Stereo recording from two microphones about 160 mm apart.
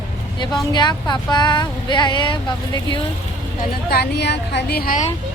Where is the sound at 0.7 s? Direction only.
25° left (ahead or behind).